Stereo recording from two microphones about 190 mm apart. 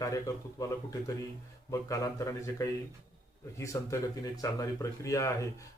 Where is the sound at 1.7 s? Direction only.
15° left (ahead or behind).